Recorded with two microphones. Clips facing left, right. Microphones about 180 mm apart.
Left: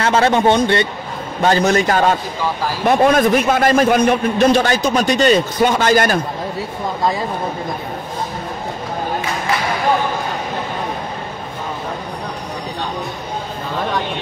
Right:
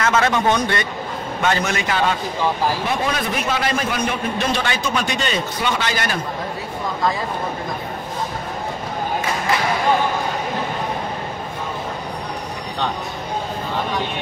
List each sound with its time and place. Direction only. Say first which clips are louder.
0.0 s a man's voice: left 4 dB; 30° left (ahead or behind)